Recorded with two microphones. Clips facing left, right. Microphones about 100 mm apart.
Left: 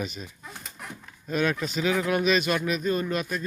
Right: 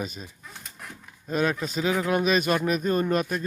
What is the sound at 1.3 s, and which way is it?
Speech, 35° right (ahead or behind).